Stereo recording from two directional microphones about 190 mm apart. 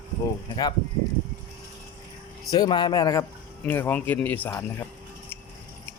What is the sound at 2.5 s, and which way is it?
Speech, 20° left (ahead or behind).